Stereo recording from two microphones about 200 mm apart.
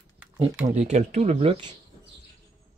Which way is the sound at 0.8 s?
35° right (ahead or behind).